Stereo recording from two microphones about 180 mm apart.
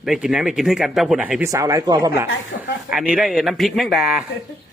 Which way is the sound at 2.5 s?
60° left (ahead or behind).